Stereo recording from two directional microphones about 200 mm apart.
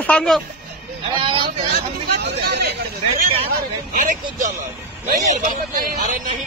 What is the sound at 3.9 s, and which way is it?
A man's voice, 40° right (ahead or behind).